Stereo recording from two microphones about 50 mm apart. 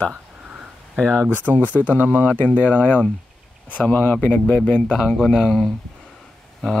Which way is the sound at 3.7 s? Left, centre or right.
Left.